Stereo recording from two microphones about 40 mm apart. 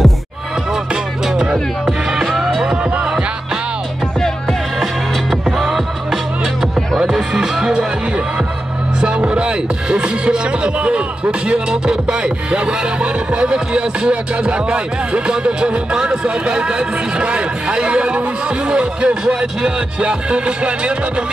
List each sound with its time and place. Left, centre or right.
1.3 s music: centre
4.2 s music: centre
5.3 s music: centre
7.0 s music: centre
9.0 s speech: right